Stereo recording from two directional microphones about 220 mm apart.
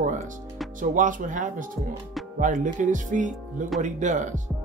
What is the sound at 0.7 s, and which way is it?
Speech, 35° right (ahead or behind).